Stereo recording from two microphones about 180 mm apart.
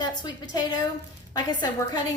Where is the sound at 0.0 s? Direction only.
25° left (ahead or behind).